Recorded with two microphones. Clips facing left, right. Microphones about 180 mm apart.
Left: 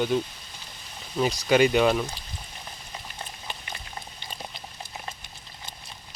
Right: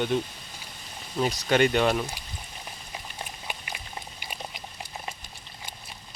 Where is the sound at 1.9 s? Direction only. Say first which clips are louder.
Left 2 dB; 10° right (ahead or behind).